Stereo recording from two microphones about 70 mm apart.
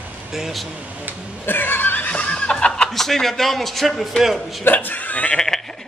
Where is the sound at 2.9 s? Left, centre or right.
Centre.